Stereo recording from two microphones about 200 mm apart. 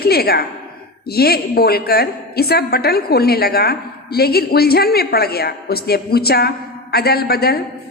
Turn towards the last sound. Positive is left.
turn(degrees=50)  # may be behind; listen again after turning